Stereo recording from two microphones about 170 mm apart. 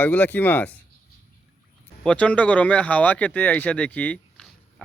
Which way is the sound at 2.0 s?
5° left (ahead or behind).